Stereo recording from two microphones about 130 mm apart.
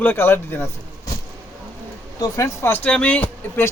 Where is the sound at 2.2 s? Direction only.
20° left (ahead or behind).